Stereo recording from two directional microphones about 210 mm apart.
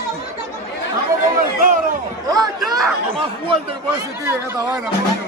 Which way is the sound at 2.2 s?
20° right (ahead or behind).